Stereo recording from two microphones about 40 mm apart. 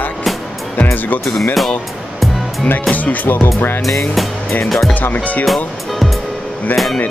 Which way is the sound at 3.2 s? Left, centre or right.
Left.